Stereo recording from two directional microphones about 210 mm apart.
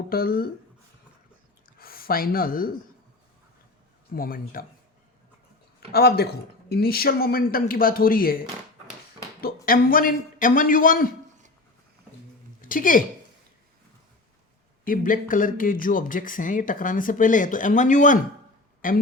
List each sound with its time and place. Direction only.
0.1 s speech: 45° left (ahead or behind)
1.8 s speech: 45° left (ahead or behind)
4.1 s speech: 45° left (ahead or behind)
5.9 s speech: 50° left (ahead or behind)
12.6 s speech: 40° left (ahead or behind)
14.8 s speech: 40° left (ahead or behind)